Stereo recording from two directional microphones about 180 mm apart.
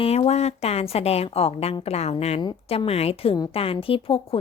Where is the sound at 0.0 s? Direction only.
35° left (ahead or behind).